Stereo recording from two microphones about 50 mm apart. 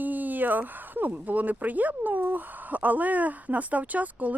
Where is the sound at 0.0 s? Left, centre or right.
Right.